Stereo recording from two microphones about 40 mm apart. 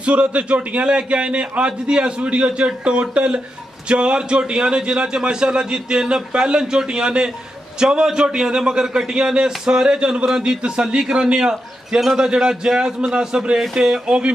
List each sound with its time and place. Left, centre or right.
0.0 s a man's voice: right; by 14.1 s centre